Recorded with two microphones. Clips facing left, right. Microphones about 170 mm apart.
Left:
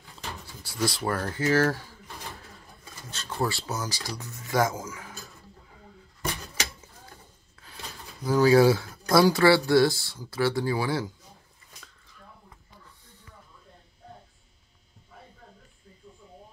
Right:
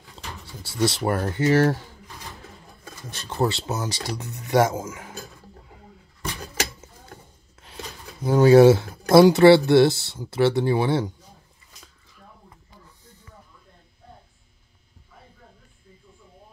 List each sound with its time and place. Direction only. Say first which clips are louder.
0.8 s speech: right 5 dB; 25° right (ahead or behind)
3.1 s speech: right 5 dB; 20° right (ahead or behind)
8.2 s speech: right 6 dB; 25° right (ahead or behind)